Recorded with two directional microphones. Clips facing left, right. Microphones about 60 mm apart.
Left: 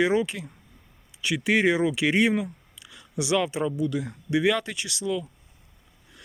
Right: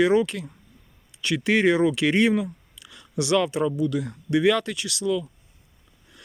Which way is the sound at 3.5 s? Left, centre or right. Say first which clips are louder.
Right 3 dB; left.